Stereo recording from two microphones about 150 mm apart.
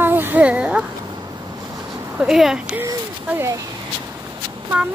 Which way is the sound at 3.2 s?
20° right (ahead or behind).